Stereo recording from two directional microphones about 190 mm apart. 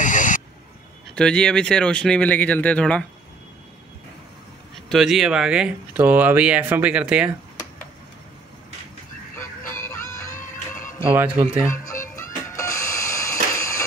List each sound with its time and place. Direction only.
0.0 s a sound: 40° left (ahead or behind)
1.1 s speech: 5° left (ahead or behind)
4.8 s speech: centre (ahead or behind)
9.8 s music: 15° left (ahead or behind)
11.1 s speech: 10° right (ahead or behind)
11.6 s speech: 15° left (ahead or behind)
12.2 s music: 15° left (ahead or behind)